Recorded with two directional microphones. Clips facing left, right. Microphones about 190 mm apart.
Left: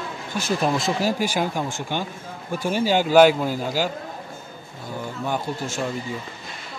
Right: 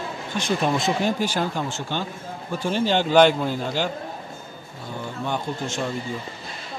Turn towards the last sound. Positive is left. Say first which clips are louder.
# left 1 dB
turn(degrees=5)  # may be behind; listen again after turning